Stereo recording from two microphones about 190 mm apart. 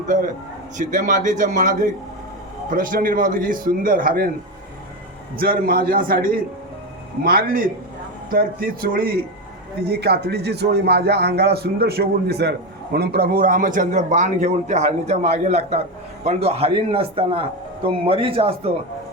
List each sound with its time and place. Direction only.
0.8 s a man's voice: 45° right (ahead or behind)
5.4 s a man's voice: 50° right (ahead or behind); by 18.7 s 30° right (ahead or behind)